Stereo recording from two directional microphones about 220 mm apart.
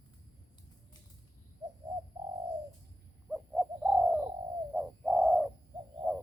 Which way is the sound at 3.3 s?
5° right (ahead or behind).